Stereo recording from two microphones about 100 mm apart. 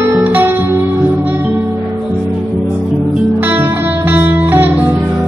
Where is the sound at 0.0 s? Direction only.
20° right (ahead or behind).